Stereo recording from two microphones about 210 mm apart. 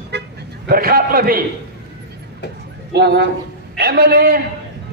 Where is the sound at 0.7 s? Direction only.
45° right (ahead or behind).